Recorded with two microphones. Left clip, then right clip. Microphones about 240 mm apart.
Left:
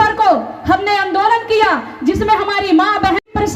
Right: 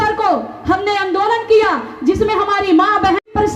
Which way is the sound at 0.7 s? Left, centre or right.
Left.